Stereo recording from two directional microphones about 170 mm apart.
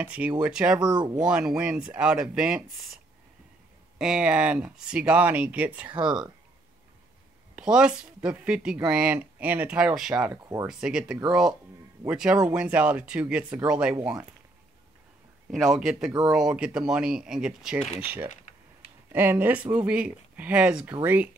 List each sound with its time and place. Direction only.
0.0 s speech: 10° right (ahead or behind)
0.8 s speech: 25° right (ahead or behind)
1.3 s speech: 5° right (ahead or behind)
4.0 s speech: 5° right (ahead or behind)
7.5 s speech: 5° right (ahead or behind)
15.5 s speech: centre (ahead or behind)